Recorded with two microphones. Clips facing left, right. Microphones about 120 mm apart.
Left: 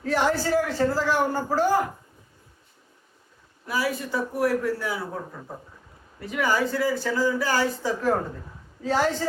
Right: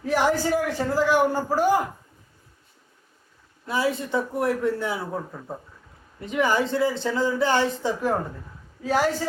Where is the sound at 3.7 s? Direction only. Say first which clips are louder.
Right 2 dB; 25° right (ahead or behind).